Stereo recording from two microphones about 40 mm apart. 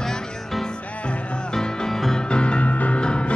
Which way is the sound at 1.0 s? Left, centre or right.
Left.